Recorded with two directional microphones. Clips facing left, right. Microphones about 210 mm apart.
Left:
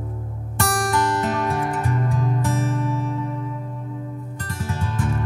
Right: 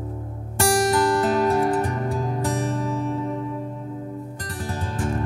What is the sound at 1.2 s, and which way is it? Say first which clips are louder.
Music: right 4 dB; 35° right (ahead or behind).